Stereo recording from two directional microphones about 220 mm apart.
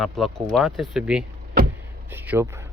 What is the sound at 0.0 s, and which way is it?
Speech, centre (ahead or behind).